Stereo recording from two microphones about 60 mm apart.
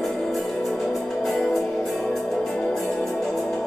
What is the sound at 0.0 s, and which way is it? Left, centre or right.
Music, centre.